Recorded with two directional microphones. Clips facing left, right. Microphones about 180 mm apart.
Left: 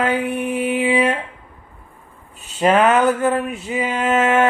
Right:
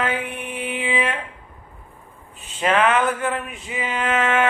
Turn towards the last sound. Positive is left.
turn(degrees=40)  # may be behind; listen again after turning